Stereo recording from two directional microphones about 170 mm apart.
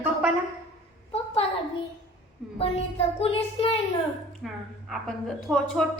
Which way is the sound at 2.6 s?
35° left (ahead or behind).